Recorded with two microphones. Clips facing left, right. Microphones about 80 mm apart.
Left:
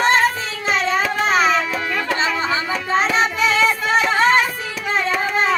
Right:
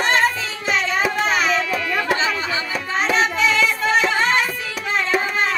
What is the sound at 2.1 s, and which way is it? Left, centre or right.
Music, left.